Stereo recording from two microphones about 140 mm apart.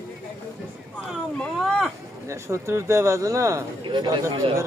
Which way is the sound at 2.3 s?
20° right (ahead or behind).